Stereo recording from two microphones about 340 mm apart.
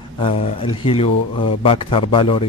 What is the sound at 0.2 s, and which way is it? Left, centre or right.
Speech, centre.